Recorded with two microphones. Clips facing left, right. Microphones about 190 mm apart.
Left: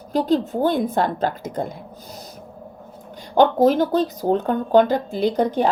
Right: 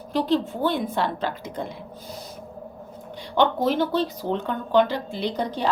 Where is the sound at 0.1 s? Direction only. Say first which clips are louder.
Left 3 dB; 40° left (ahead or behind).